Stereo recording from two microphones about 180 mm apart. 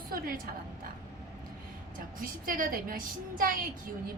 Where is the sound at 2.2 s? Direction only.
50° right (ahead or behind).